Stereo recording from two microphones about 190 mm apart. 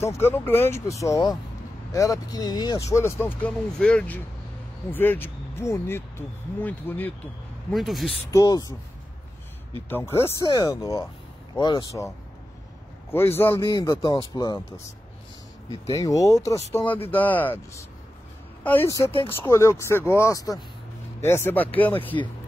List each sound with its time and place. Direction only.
0.0 s speech: 15° left (ahead or behind)
7.7 s speech: centre (ahead or behind)
8.3 s speech: 20° left (ahead or behind)
9.8 s speech: 10° left (ahead or behind)
13.1 s speech: 10° left (ahead or behind)
15.9 s speech: 20° left (ahead or behind)